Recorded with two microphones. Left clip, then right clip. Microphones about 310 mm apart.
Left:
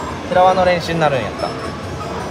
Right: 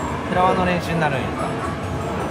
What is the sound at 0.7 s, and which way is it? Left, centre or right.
Speech, left.